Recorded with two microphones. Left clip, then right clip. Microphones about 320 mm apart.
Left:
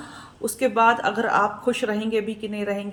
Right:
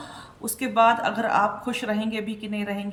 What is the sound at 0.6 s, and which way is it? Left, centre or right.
A woman's voice, right.